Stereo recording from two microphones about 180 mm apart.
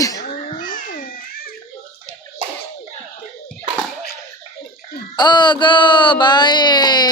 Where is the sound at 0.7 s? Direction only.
50° left (ahead or behind).